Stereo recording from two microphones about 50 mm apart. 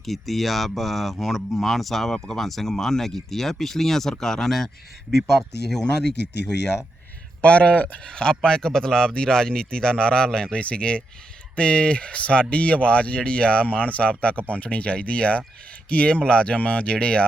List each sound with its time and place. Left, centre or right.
0.0 s a man's voice: centre
7.4 s a man's voice: left